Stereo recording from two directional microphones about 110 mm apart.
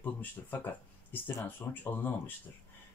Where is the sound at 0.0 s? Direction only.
15° left (ahead or behind).